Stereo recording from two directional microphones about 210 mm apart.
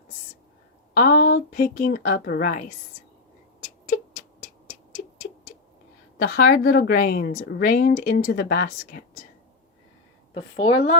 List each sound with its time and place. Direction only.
0.9 s a woman's voice: 45° left (ahead or behind)
3.8 s a sound: 40° left (ahead or behind)
6.1 s a woman's voice: 45° left (ahead or behind)
10.3 s a woman's voice: 25° left (ahead or behind)